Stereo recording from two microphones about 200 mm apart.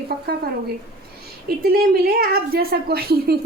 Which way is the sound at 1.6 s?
50° right (ahead or behind).